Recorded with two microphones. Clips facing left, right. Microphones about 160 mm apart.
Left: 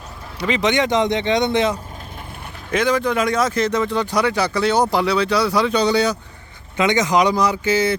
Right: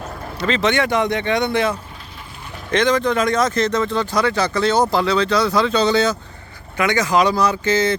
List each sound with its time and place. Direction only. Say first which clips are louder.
0.3 s speech: even; 15° left (ahead or behind)
2.7 s speech: right 1 dB; 10° left (ahead or behind)